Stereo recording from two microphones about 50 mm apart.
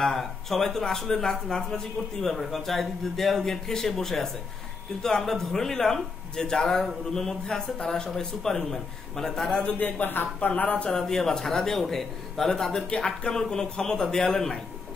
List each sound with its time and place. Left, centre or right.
0.0 s speech: centre
9.6 s a man's voice: left
10.0 s speech: left
10.5 s a man's voice: left
10.9 s speech: centre